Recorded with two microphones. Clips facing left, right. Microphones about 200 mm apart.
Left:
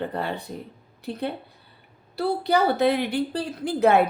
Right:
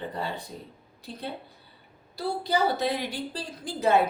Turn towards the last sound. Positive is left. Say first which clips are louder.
# left 5 dB
turn(degrees=60)  # may be behind; listen again after turning